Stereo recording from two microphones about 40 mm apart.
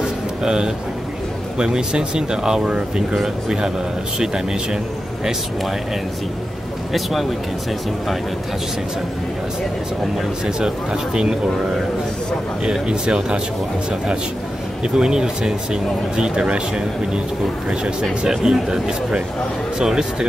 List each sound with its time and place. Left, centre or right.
0.4 s a man's voice: centre
6.9 s speech: centre
10.6 s speech: centre
12.6 s speech: right
14.8 s speech: right
18.2 s a man's voice: centre